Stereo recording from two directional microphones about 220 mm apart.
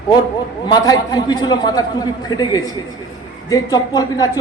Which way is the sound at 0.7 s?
20° left (ahead or behind).